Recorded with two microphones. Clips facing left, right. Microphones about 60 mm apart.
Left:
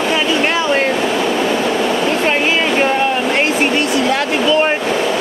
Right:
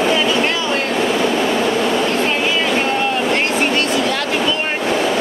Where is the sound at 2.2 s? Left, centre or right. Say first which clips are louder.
Left 3 dB; left.